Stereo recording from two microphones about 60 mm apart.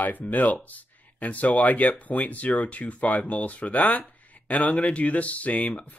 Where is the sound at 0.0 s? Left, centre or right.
Left.